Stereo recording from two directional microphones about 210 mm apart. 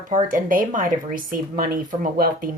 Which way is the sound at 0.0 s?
40° right (ahead or behind).